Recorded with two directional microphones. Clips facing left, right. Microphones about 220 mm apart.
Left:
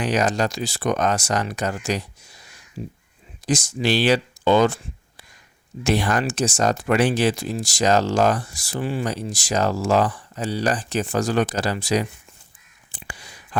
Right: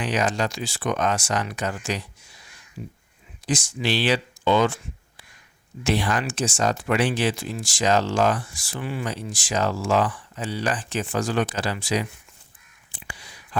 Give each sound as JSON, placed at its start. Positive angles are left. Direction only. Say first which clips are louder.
{"t": 0.0, "sound": "speech", "louder": "left 3 dB", "side_deg": 40}
{"t": 2.8, "sound": "speech", "louder": "left 4 dB", "side_deg": 30}
{"t": 3.4, "sound": "speech", "louder": "left 4 dB", "side_deg": 40}
{"t": 12.9, "sound": "a sound", "louder": "left 2 dB", "side_deg": 45}